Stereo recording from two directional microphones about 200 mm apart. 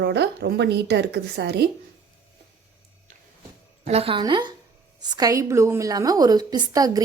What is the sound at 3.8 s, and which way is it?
A woman's voice, 30° right (ahead or behind).